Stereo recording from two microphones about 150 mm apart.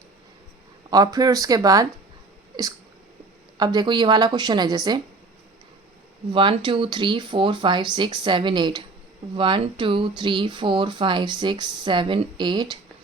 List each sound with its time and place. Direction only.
0.9 s a woman's voice: 25° right (ahead or behind)
2.5 s a sound: 30° right (ahead or behind)
3.6 s a woman's voice: 30° right (ahead or behind)
6.3 s speech: 35° right (ahead or behind)